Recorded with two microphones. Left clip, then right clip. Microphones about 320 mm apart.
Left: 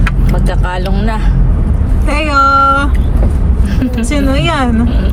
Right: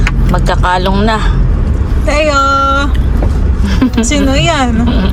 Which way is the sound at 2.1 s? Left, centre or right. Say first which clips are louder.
Right 5 dB; centre.